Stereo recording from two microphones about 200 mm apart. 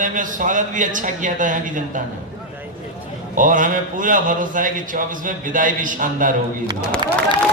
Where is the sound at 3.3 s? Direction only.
40° right (ahead or behind).